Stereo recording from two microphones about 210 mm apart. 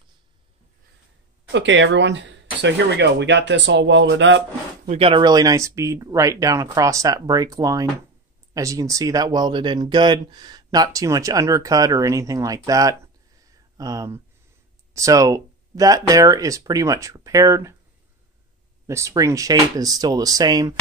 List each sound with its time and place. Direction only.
1.5 s speech: 60° right (ahead or behind)
4.8 s speech: 25° right (ahead or behind)
18.9 s speech: 15° right (ahead or behind)